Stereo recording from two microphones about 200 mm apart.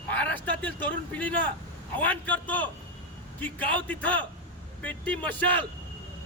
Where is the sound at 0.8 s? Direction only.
5° left (ahead or behind).